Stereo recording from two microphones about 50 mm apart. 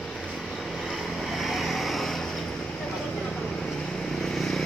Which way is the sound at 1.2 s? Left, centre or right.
Centre.